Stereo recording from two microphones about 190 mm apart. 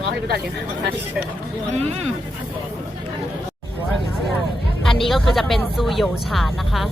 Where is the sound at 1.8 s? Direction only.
35° right (ahead or behind).